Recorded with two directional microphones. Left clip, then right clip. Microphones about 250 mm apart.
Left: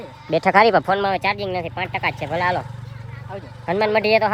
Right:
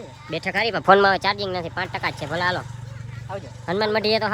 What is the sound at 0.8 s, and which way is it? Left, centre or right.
Speech, right.